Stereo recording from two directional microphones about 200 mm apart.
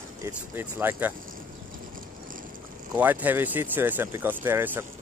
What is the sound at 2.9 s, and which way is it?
Speech, 10° right (ahead or behind).